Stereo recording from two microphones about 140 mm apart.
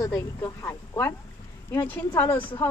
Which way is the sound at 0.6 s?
20° left (ahead or behind).